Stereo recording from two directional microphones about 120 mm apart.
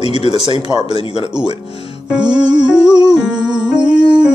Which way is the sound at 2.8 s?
35° right (ahead or behind).